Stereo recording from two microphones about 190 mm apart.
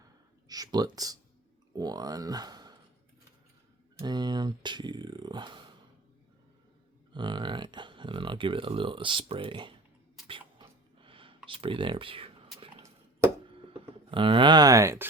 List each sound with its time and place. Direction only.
0.4 s speech: 20° right (ahead or behind)
3.9 s speech: 20° right (ahead or behind)
7.1 s speech: 25° right (ahead or behind)
10.2 s a sound: 25° right (ahead or behind)
11.4 s speech: 25° right (ahead or behind)
13.7 s speech: 30° right (ahead or behind)